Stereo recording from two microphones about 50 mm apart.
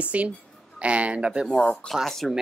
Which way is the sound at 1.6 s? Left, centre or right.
Left.